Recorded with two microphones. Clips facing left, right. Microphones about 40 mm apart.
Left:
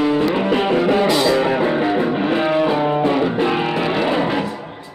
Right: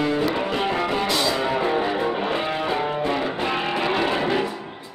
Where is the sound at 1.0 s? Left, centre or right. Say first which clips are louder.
Left 7 dB; centre.